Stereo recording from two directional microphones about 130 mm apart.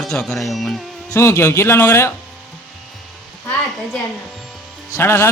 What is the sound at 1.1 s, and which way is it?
A man's voice, 20° left (ahead or behind).